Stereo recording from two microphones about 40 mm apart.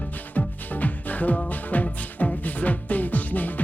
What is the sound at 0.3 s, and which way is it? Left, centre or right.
Music, left.